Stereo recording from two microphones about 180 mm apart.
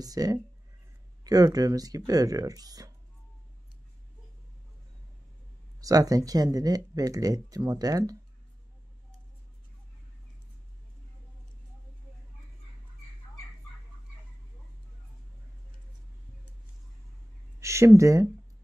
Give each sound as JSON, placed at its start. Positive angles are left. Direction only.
{"t": 0.0, "sound": "speech", "side_deg": -20}
{"t": 5.8, "sound": "speech", "side_deg": -20}
{"t": 17.6, "sound": "speech", "side_deg": -15}